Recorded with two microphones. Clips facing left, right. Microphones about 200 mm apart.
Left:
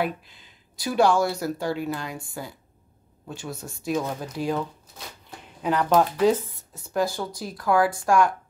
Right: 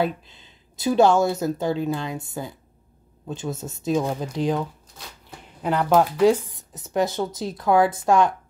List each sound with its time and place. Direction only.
0.7 s speech: 25° right (ahead or behind)
5.7 s speech: 10° right (ahead or behind)